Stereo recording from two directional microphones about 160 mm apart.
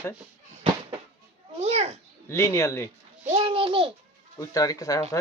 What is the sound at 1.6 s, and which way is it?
Speech, 40° right (ahead or behind).